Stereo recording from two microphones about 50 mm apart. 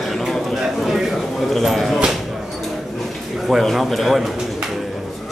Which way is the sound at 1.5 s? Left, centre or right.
Centre.